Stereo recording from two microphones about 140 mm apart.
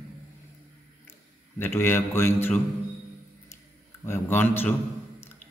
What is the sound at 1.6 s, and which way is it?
A man's voice, 15° left (ahead or behind).